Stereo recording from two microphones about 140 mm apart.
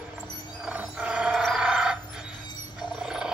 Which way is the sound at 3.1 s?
5° right (ahead or behind).